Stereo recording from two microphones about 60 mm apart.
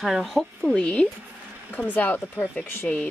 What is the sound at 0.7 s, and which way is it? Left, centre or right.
Speech, centre.